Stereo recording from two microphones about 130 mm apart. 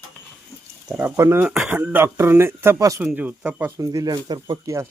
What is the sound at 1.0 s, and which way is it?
Speech, 20° right (ahead or behind).